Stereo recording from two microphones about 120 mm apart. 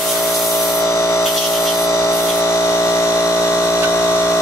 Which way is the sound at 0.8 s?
25° left (ahead or behind).